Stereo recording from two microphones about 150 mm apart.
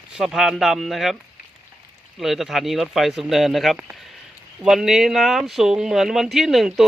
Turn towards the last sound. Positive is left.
turn(degrees=0)  # may be behind; listen again after turning